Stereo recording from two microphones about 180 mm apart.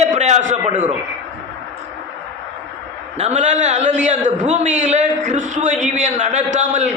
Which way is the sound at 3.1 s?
40° right (ahead or behind).